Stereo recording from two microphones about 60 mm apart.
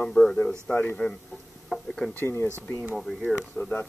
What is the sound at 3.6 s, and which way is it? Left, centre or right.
Speech, left.